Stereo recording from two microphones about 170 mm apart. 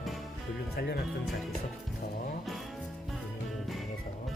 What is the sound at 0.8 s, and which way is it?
Speech, 65° left (ahead or behind).